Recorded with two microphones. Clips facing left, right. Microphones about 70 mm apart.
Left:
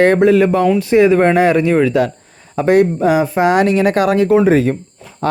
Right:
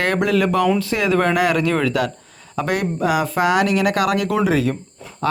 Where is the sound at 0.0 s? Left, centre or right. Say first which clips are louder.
Left 8 dB; left.